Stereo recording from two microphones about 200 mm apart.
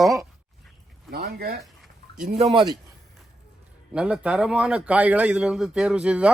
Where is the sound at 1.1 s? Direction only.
50° right (ahead or behind).